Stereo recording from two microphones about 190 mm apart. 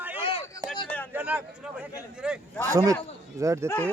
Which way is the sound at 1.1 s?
10° right (ahead or behind).